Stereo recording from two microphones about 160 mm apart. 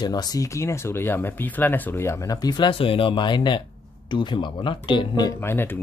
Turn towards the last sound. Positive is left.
turn(degrees=15)  # may be behind; listen again after turning